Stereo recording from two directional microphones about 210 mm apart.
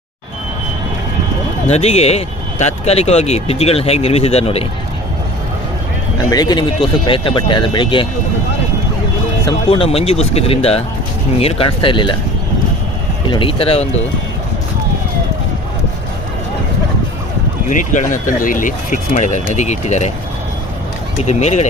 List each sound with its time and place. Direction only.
1.6 s speech: 30° left (ahead or behind)
6.3 s speech: 20° left (ahead or behind)
9.5 s speech: 25° left (ahead or behind)
13.3 s speech: 25° left (ahead or behind)
17.7 s speech: 35° left (ahead or behind)
21.2 s speech: 30° left (ahead or behind)